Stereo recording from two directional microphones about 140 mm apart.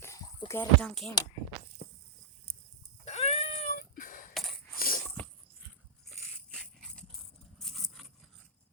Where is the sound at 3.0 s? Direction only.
50° left (ahead or behind); by 4.2 s 70° left (ahead or behind).